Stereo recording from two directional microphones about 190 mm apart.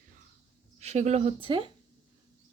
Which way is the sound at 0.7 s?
35° right (ahead or behind).